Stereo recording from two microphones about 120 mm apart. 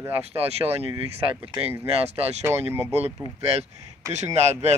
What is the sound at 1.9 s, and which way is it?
Speech, 55° right (ahead or behind).